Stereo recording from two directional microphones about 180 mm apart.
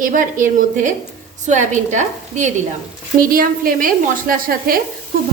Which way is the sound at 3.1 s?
55° right (ahead or behind).